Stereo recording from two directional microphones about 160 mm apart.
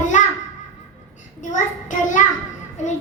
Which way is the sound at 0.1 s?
50° left (ahead or behind).